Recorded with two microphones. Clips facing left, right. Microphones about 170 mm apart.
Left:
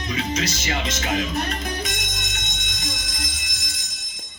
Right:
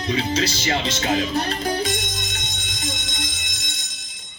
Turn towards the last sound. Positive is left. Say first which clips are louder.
# right 2 dB
turn(degrees=-25)  # may be behind; listen again after turning